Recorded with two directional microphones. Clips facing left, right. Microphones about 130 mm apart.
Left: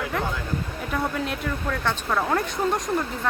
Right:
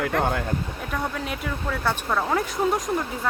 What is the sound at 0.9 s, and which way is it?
Speech, centre (ahead or behind).